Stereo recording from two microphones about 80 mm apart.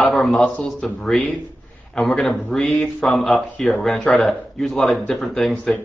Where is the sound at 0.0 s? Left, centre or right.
Centre.